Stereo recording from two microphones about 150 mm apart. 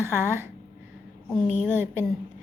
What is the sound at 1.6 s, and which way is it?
Speech, 15° right (ahead or behind).